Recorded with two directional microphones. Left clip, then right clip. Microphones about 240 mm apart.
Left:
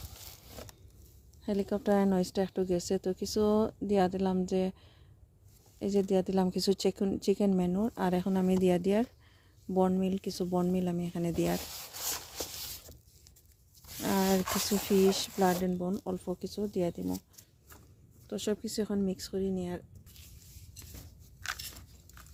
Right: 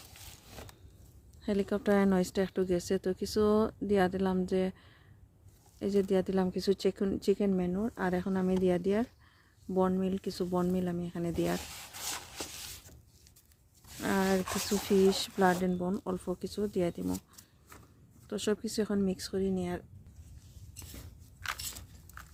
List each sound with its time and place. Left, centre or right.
1.5 s speech: centre
11.6 s rub: left
14.0 s a sound: centre
14.3 s speech: left
15.1 s speech: centre
21.6 s biting: centre